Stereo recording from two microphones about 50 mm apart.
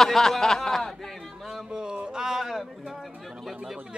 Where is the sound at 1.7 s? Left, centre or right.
Centre.